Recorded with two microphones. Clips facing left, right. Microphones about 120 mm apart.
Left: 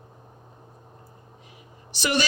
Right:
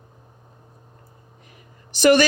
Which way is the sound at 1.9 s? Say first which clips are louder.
Right 10 dB; 50° right (ahead or behind).